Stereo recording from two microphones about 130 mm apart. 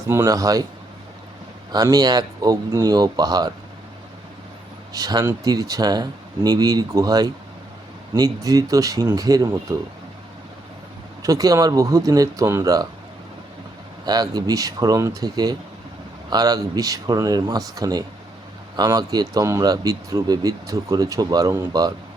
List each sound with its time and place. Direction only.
0.1 s speech: 25° right (ahead or behind)
1.7 s speech: 30° right (ahead or behind)
4.9 s speech: 30° right (ahead or behind)
11.2 s speech: 25° right (ahead or behind)
14.0 s speech: 30° right (ahead or behind)